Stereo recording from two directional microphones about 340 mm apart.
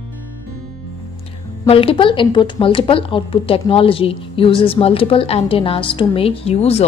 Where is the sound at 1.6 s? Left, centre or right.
Centre.